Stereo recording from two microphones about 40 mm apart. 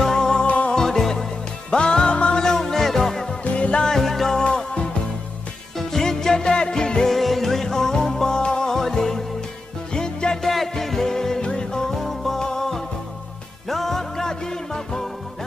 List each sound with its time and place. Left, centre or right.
0.0 s music: centre
1.7 s music: left
2.4 s music: centre
3.5 s music: left
3.9 s music: centre
5.8 s music: centre
7.1 s music: centre
10.4 s music: centre
11.9 s music: centre